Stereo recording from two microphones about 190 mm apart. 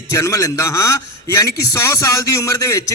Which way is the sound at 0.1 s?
15° left (ahead or behind).